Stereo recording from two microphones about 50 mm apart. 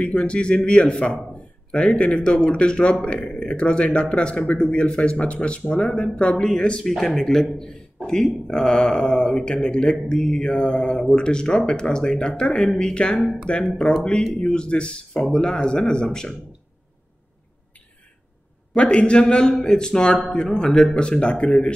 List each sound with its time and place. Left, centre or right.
0.0 s speech: left
6.9 s speech: centre
18.8 s speech: left